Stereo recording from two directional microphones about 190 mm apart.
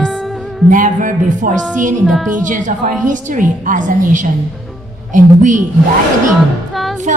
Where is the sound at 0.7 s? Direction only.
45° right (ahead or behind).